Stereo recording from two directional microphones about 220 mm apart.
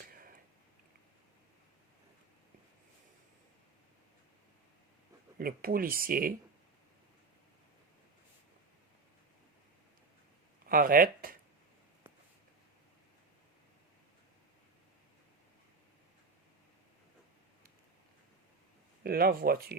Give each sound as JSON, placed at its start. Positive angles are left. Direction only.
{"t": 5.4, "sound": "speech", "side_deg": -40}
{"t": 10.7, "sound": "speech", "side_deg": -40}
{"t": 19.0, "sound": "speech", "side_deg": -45}